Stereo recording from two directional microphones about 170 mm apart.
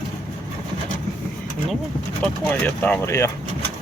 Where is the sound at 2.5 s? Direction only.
10° left (ahead or behind).